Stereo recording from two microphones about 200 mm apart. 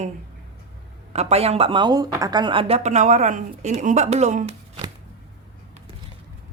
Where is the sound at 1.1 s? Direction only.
30° right (ahead or behind).